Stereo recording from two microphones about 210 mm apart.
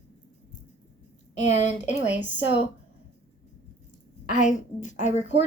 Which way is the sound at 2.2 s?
55° left (ahead or behind).